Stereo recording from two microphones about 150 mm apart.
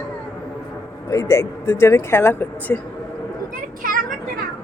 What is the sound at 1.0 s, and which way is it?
Speech, 20° left (ahead or behind).